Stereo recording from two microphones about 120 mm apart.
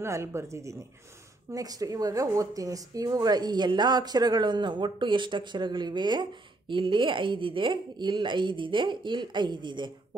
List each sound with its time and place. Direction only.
0.0 s speech: 20° right (ahead or behind); by 9.9 s 40° right (ahead or behind)